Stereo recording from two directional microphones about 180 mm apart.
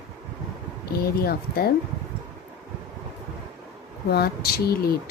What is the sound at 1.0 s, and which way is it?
Speech, 60° left (ahead or behind).